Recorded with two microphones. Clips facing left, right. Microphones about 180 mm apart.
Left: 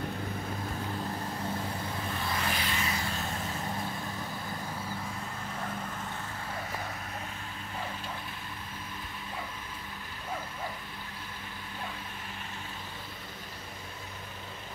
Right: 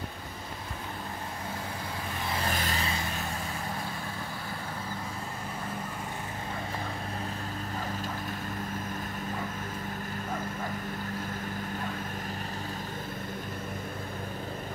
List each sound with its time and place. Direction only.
2.5 s vehicle: 40° right (ahead or behind)